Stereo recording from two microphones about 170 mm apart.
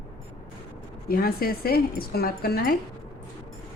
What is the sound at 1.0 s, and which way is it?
Speech, 60° left (ahead or behind).